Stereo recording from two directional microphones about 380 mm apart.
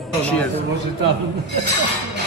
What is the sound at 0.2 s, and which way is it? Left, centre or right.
Speech, centre.